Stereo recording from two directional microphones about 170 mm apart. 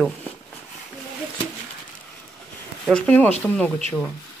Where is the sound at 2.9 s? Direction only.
5° left (ahead or behind).